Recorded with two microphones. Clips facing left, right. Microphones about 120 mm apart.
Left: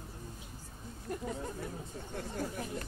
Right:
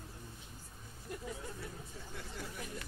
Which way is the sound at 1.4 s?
45° left (ahead or behind).